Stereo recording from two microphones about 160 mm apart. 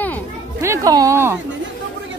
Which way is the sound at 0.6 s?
20° right (ahead or behind).